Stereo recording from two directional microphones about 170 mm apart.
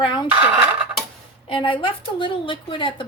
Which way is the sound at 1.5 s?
30° left (ahead or behind).